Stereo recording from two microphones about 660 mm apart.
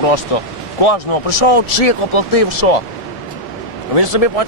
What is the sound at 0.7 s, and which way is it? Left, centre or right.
Speech, left.